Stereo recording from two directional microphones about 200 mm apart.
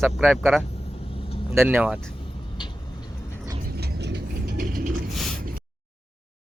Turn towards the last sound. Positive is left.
turn(degrees=-45)  # may be behind; listen again after turning